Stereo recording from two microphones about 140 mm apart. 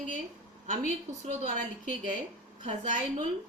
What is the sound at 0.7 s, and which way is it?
A woman's voice, 65° right (ahead or behind).